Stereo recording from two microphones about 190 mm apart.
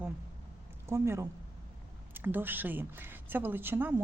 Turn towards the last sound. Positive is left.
turn(degrees=-10)  # may be behind; listen again after turning